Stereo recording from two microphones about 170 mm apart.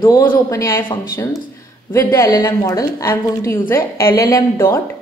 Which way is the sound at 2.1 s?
15° left (ahead or behind).